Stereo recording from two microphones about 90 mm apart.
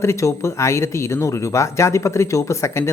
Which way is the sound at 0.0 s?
30° left (ahead or behind).